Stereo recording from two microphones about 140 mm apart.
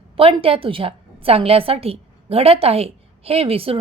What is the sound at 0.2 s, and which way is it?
A woman's voice, 40° right (ahead or behind).